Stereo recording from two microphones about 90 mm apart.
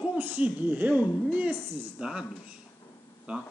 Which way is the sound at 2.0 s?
10° right (ahead or behind).